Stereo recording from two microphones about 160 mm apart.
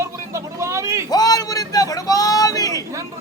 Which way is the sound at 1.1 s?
25° left (ahead or behind).